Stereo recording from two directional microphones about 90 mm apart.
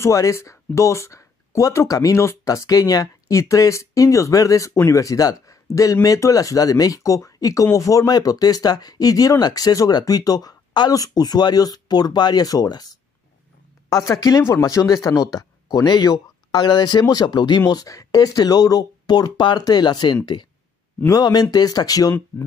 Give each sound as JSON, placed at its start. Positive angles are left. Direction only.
{"t": 0.0, "sound": "speech", "side_deg": 35}
{"t": 17.6, "sound": "speech", "side_deg": 45}